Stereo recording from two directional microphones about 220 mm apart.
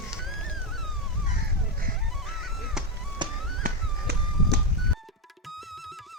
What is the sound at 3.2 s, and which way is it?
Music, 20° right (ahead or behind).